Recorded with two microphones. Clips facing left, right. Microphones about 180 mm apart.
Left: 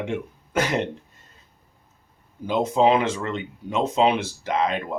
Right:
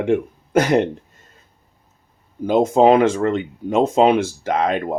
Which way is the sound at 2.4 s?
50° right (ahead or behind).